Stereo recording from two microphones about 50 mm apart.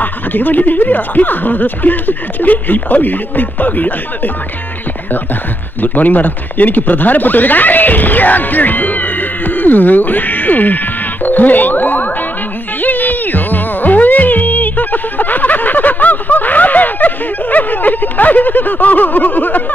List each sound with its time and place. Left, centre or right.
0.0 s speech: left
5.8 s speech: left
11.2 s ding: left
12.8 s music: left